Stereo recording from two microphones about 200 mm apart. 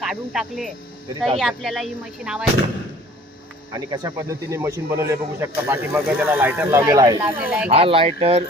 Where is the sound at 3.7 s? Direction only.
15° right (ahead or behind).